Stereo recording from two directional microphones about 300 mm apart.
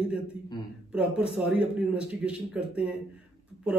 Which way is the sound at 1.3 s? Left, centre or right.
Centre.